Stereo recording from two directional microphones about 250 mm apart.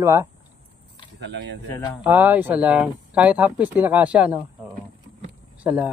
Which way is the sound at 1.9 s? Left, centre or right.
Centre.